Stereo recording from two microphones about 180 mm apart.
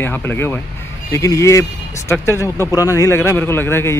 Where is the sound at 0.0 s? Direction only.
10° left (ahead or behind).